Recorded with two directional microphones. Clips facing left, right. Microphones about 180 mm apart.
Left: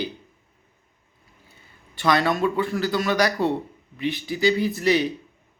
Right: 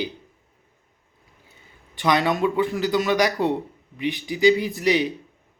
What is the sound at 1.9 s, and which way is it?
Speech, 15° right (ahead or behind).